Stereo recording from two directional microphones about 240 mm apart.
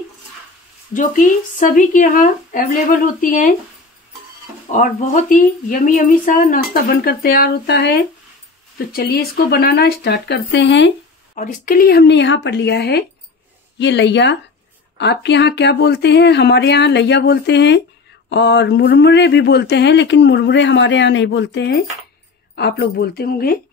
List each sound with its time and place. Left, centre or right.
0.9 s a woman's voice: left
4.6 s a woman's voice: left
11.3 s a woman's voice: left